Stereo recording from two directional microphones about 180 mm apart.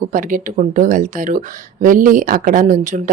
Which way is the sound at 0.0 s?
45° right (ahead or behind).